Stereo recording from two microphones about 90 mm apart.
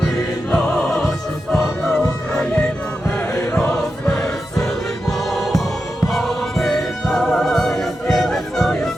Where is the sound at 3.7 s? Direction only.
15° left (ahead or behind).